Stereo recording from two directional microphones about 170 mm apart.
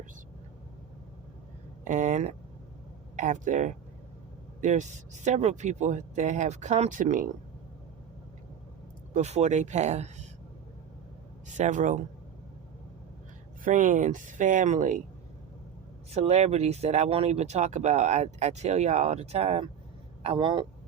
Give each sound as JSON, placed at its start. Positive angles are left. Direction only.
{"t": 1.8, "sound": "a sound", "side_deg": -45}
{"t": 3.2, "sound": "speech", "side_deg": -50}
{"t": 9.1, "sound": "speech", "side_deg": -40}
{"t": 11.4, "sound": "speech", "side_deg": -45}
{"t": 13.7, "sound": "speech", "side_deg": -50}
{"t": 16.1, "sound": "a man's voice", "side_deg": -40}